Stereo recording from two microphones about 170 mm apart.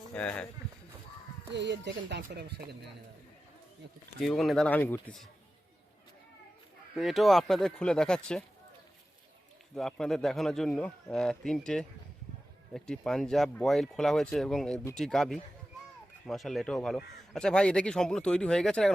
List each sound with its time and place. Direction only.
0.1 s speech: 5° left (ahead or behind)
1.5 s speech: 90° right; by 2.7 s 75° right (ahead or behind)
4.2 s speech: centre (ahead or behind)
6.9 s speech: centre (ahead or behind)
9.7 s speech: centre (ahead or behind)